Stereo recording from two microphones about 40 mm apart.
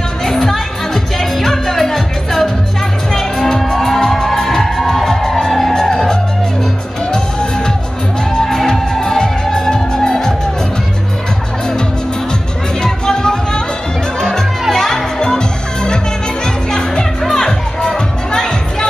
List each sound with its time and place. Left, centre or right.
0.2 s music: centre
12.8 s music: centre
14.7 s music: centre
17.2 s music: centre
17.5 s music: centre